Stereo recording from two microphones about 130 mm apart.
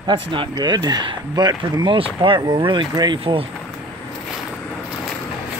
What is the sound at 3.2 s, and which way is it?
Speech, 45° right (ahead or behind).